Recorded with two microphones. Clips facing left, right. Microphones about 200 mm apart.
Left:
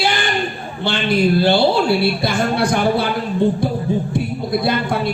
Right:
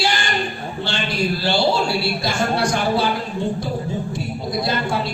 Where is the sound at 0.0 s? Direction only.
55° left (ahead or behind).